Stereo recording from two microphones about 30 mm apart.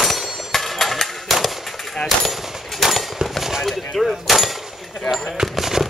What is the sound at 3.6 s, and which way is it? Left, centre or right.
Speech, centre.